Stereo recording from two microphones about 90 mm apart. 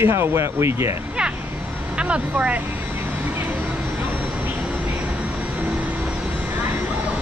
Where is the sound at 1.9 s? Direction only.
15° right (ahead or behind).